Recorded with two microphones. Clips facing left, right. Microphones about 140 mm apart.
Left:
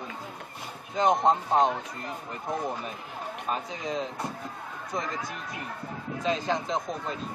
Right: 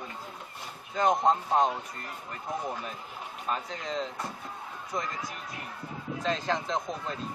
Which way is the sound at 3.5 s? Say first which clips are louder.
Left 1 dB; 10° left (ahead or behind).